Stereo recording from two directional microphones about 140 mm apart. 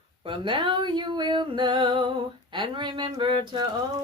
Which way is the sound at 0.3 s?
35° right (ahead or behind).